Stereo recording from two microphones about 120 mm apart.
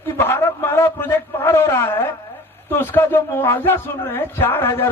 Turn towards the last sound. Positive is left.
turn(degrees=20)  # may be behind; listen again after turning